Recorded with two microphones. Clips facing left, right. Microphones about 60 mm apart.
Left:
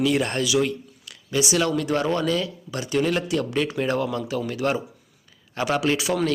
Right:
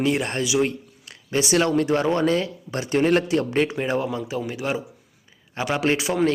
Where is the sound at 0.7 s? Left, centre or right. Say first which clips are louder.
Left 1 dB; right.